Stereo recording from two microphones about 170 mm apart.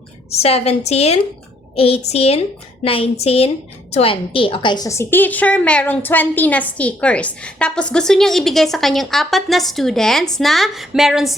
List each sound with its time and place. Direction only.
0.3 s a woman's voice: 35° left (ahead or behind); by 11.3 s centre (ahead or behind)